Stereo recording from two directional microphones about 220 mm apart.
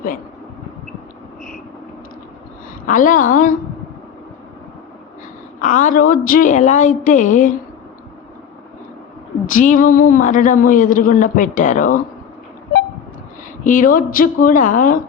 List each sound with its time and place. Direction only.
2.8 s speech: 35° left (ahead or behind)
5.5 s speech: 35° left (ahead or behind)
9.5 s speech: 35° left (ahead or behind)
13.7 s speech: 35° left (ahead or behind)